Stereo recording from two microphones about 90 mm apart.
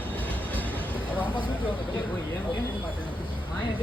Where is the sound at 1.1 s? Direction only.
20° right (ahead or behind).